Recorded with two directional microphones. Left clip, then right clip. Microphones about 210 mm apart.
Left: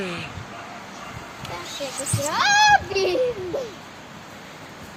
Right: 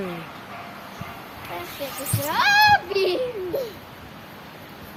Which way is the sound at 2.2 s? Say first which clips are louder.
Even; 50° left (ahead or behind).